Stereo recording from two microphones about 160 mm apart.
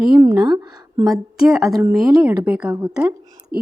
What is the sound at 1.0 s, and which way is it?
A woman's voice, centre (ahead or behind).